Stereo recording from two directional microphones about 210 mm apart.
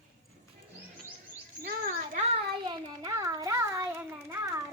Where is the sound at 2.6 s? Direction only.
20° right (ahead or behind).